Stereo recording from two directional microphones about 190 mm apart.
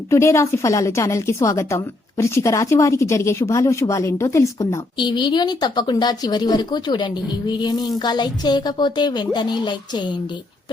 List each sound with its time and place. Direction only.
0.1 s a woman's voice: 15° left (ahead or behind)